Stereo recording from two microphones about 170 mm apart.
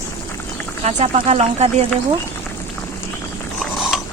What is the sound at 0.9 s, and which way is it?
Speech, 40° right (ahead or behind).